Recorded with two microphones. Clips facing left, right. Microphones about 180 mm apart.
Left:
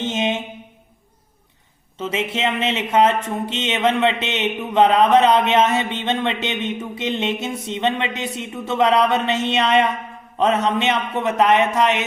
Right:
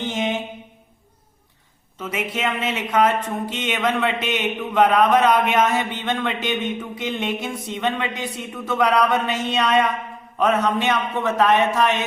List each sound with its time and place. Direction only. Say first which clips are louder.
0.0 s mantra: left 2 dB; 20° left (ahead or behind)
2.0 s speech: left 3 dB; 25° left (ahead or behind)